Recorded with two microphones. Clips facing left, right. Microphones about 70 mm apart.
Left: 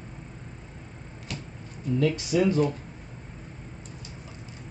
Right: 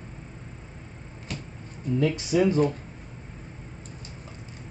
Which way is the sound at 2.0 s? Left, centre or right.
Right.